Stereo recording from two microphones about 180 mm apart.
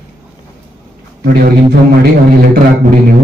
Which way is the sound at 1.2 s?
55° right (ahead or behind).